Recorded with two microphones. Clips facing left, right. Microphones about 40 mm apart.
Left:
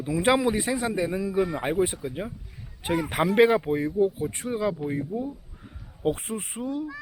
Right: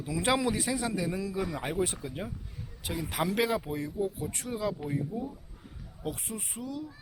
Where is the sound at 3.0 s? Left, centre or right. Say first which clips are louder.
Left 9 dB; left.